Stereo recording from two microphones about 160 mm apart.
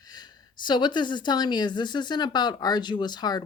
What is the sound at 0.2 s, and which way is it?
A woman's voice, 30° left (ahead or behind).